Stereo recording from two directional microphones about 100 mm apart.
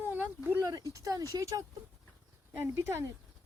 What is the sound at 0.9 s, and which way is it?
Speech, 35° right (ahead or behind).